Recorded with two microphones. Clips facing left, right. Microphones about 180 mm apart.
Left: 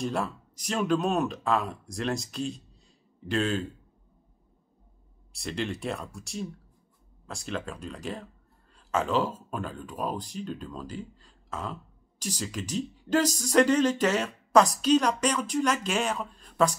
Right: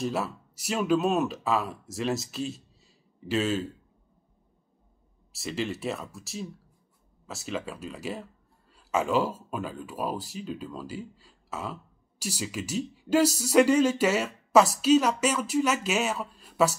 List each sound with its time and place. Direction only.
0.0 s speech: 5° right (ahead or behind)
5.3 s speech: 5° right (ahead or behind)